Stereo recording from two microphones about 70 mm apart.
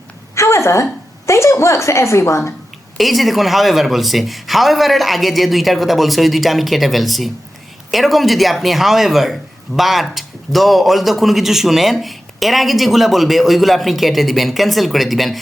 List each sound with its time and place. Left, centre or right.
0.3 s a sound: left
1.3 s a woman's voice: left
3.0 s speech: centre